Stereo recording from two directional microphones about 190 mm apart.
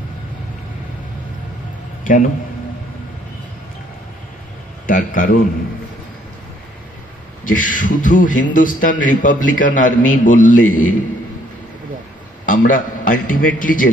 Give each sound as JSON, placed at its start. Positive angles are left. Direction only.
{"t": 4.8, "sound": "a man's voice", "side_deg": 45}
{"t": 7.4, "sound": "a man's voice", "side_deg": 45}
{"t": 12.4, "sound": "a man's voice", "side_deg": 45}